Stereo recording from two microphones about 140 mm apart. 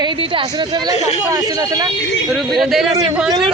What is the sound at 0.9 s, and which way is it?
Speech, 50° left (ahead or behind).